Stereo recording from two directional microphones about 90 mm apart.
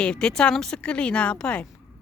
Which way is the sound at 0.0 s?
10° left (ahead or behind).